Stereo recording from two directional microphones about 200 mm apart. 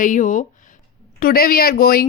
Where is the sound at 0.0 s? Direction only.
40° left (ahead or behind).